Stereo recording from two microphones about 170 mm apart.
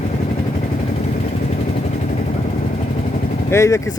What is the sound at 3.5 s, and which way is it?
Speech, 15° left (ahead or behind).